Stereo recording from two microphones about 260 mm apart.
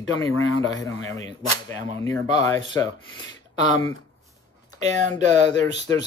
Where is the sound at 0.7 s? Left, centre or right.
Centre.